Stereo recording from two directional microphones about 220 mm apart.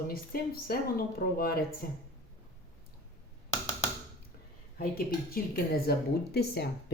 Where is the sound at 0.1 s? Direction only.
45° left (ahead or behind).